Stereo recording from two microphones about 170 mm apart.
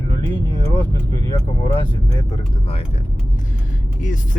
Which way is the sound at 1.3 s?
30° left (ahead or behind).